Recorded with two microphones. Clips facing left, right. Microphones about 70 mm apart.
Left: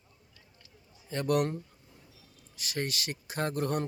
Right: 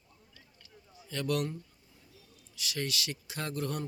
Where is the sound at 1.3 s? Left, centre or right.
Left.